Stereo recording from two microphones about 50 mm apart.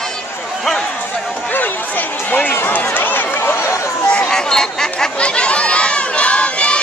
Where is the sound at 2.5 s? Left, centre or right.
Left.